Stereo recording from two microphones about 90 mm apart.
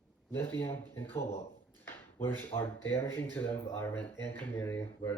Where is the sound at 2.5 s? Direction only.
90° left.